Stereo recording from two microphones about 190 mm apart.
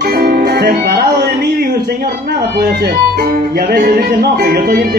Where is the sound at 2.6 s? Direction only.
55° right (ahead or behind).